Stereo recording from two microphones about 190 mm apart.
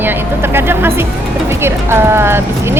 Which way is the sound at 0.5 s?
10° right (ahead or behind).